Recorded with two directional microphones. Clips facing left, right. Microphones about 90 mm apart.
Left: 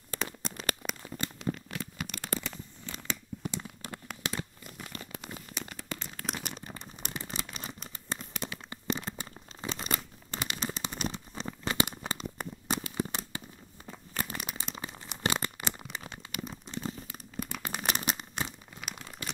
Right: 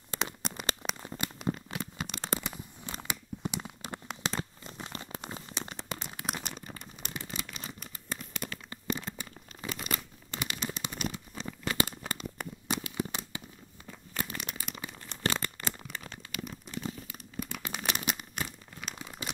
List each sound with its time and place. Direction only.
0.1 s a sound: 20° right (ahead or behind)
4.4 s crumpling: 25° right (ahead or behind)
6.7 s crumpling: 25° left (ahead or behind)
12.6 s a sound: 35° left (ahead or behind)
14.6 s crumpling: 25° left (ahead or behind)
16.4 s crumpling: 30° left (ahead or behind)
17.8 s a sound: 35° left (ahead or behind)
18.4 s crumpling: 25° left (ahead or behind)
18.8 s crumpling: centre (ahead or behind)